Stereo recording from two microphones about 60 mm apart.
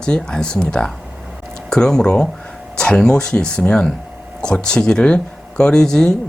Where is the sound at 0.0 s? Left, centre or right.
Centre.